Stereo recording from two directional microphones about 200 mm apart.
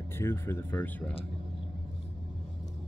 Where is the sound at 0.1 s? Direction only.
10° left (ahead or behind).